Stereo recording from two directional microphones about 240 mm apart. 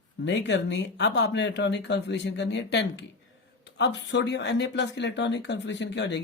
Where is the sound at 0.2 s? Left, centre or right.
Left.